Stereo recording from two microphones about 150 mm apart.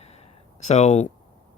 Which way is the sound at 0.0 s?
45° left (ahead or behind).